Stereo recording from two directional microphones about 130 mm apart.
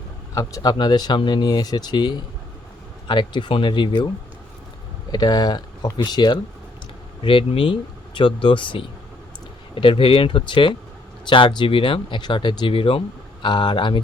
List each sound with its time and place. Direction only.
0.3 s speech: 30° left (ahead or behind)
5.1 s speech: 30° left (ahead or behind)